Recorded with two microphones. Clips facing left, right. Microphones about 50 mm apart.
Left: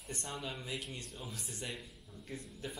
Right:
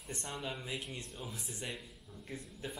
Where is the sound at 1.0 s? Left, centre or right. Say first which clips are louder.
Right 1 dB; centre.